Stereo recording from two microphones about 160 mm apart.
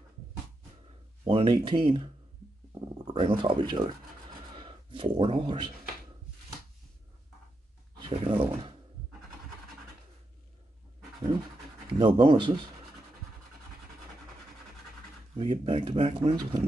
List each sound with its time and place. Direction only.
1.2 s speech: 35° right (ahead or behind)
8.1 s speech: 30° right (ahead or behind)
11.9 s speech: 35° right (ahead or behind)
15.3 s speech: 35° right (ahead or behind)